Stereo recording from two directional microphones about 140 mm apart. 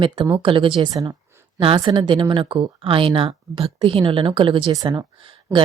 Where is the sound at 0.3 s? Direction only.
40° right (ahead or behind).